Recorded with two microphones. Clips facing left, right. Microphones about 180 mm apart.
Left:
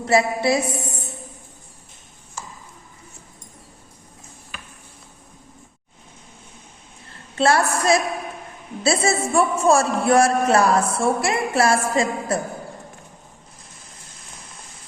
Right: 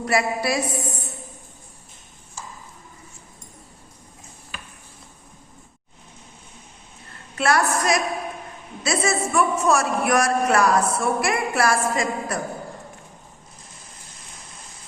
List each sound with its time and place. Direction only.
0.0 s a woman's voice: 25° left (ahead or behind)
7.3 s a man's voice: 30° left (ahead or behind)